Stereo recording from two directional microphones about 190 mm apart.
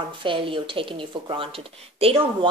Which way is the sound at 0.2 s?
25° right (ahead or behind).